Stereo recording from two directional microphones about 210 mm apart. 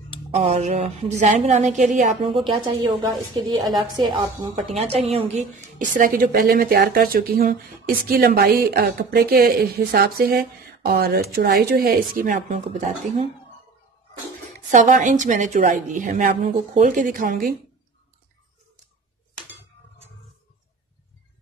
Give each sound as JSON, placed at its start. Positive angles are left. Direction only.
{"t": 0.3, "sound": "a woman's voice", "side_deg": -30}
{"t": 14.7, "sound": "a woman's voice", "side_deg": -35}